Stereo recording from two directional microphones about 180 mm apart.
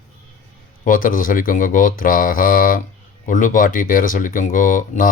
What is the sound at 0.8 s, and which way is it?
Speech, 50° left (ahead or behind).